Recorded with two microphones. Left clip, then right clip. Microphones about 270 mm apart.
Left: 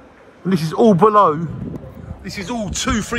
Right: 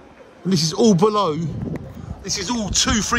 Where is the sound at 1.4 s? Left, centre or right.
Centre.